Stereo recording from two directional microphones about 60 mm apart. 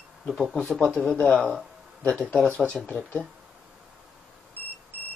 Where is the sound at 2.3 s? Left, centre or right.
Centre.